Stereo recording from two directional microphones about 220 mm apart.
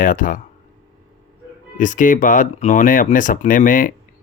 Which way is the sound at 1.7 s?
35° left (ahead or behind).